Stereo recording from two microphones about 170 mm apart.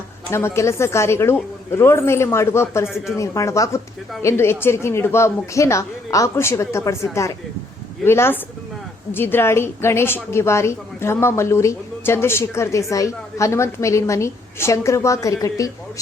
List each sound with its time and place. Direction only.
0.3 s a woman's voice: 15° left (ahead or behind)